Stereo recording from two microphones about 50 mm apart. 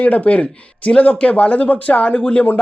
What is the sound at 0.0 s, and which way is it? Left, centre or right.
Speech, left.